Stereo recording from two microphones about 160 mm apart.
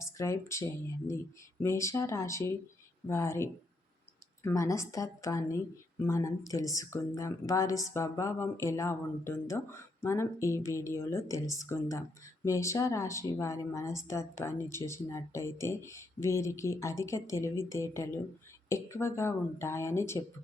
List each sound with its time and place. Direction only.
0.0 s a woman's voice: 20° left (ahead or behind)